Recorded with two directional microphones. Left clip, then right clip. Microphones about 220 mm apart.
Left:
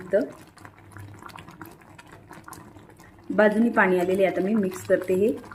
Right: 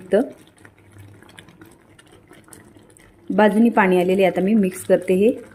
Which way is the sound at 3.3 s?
35° right (ahead or behind).